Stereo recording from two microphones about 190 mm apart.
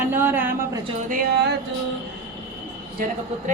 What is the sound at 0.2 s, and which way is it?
Speech, 10° right (ahead or behind).